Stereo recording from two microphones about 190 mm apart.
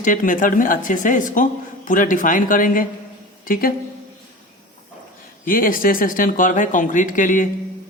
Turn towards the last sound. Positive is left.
turn(degrees=45)  # may be behind; listen again after turning